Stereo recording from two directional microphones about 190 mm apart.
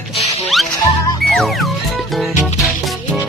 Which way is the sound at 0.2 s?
35° left (ahead or behind).